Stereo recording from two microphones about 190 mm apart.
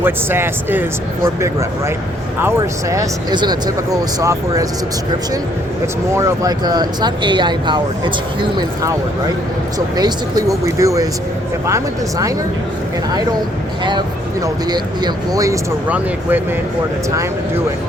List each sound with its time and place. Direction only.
0.0 s speech: 10° right (ahead or behind)
2.4 s speech: 15° right (ahead or behind)
5.8 s speech: 15° right (ahead or behind)
14.4 s speech: 20° right (ahead or behind)